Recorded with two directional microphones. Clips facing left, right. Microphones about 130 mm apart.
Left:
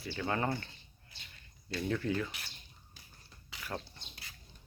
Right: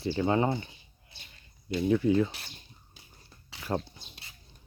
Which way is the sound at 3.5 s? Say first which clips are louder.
Right 9 dB; 30° right (ahead or behind).